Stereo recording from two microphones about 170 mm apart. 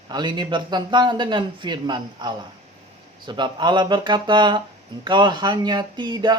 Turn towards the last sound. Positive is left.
turn(degrees=-25)  # may be behind; listen again after turning